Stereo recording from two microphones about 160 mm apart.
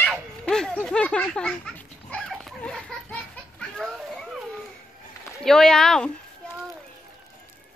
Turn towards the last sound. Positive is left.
turn(degrees=5)  # may be behind; listen again after turning